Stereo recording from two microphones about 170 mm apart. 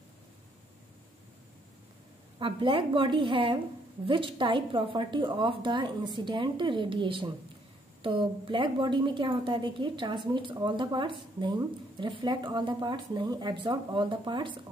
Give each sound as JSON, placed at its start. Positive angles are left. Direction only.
{"t": 2.3, "sound": "a woman's voice", "side_deg": -30}